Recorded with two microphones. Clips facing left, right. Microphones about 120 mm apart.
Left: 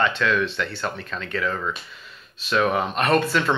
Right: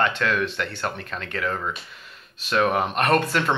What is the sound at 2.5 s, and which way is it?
Speech, 50° right (ahead or behind).